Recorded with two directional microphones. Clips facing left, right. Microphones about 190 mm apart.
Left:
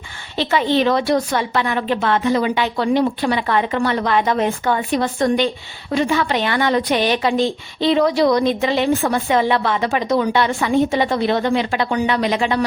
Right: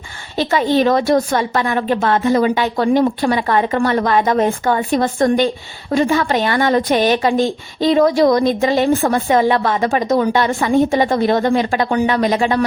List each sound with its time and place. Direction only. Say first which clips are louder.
0.3 s a woman's voice: right 2 dB; 45° right (ahead or behind)